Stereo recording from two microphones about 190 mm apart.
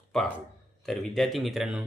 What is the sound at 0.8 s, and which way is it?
Speech, centre (ahead or behind).